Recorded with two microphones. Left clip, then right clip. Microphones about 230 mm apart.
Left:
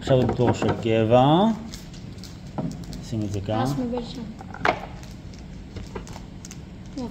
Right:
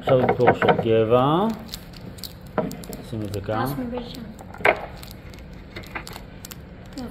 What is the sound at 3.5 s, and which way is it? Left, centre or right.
Speech, centre.